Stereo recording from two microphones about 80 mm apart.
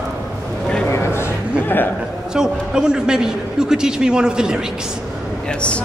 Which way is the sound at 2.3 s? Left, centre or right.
Centre.